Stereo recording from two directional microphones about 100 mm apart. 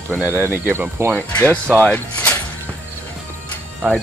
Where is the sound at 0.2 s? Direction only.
20° right (ahead or behind).